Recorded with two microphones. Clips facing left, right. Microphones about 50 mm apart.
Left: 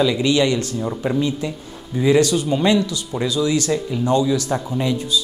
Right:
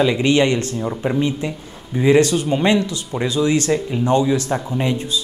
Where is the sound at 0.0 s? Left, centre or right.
Right.